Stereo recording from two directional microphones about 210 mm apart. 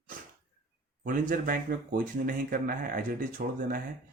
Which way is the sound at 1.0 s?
40° right (ahead or behind).